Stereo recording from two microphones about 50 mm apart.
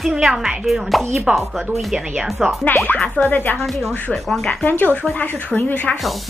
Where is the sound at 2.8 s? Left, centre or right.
Left.